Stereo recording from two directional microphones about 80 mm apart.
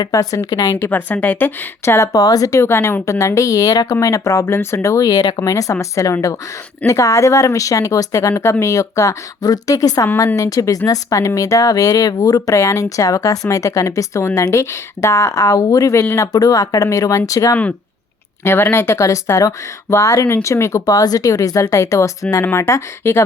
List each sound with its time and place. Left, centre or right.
0.0 s speech: left
0.9 s speech: left
1.8 s speech: left
2.1 s speech: left
17.5 s speech: left
20.8 s speech: left